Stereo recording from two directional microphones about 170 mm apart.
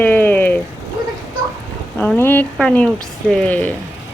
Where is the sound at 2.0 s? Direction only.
10° left (ahead or behind).